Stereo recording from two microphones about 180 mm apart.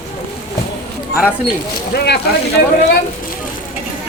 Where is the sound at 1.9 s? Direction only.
65° left (ahead or behind).